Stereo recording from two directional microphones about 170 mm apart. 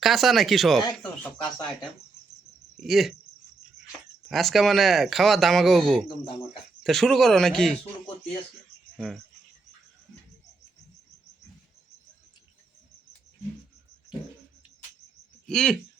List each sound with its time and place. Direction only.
0.0 s speech: centre (ahead or behind)
2.8 s speech: centre (ahead or behind)
4.3 s speech: centre (ahead or behind)
15.4 s speech: 5° left (ahead or behind)